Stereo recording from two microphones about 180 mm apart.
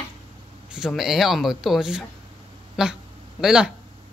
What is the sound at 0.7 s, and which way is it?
Speech, 5° right (ahead or behind).